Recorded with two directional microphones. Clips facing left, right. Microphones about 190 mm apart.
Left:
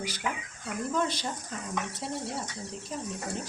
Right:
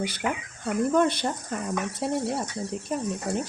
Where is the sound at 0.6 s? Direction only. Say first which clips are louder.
Right 8 dB; 60° right (ahead or behind).